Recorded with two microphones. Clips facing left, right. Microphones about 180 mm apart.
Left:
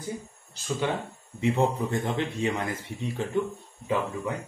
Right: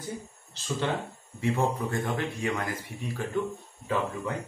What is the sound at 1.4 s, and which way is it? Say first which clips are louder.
A man's voice: left 3 dB; 20° left (ahead or behind).